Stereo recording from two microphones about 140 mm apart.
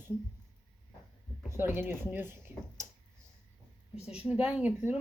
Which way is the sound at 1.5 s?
15° right (ahead or behind).